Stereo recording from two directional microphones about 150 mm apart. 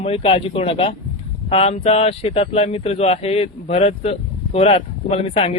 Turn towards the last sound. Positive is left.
turn(degrees=40)  # may be behind; listen again after turning